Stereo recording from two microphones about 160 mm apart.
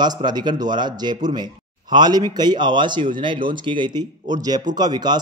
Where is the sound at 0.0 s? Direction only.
25° right (ahead or behind).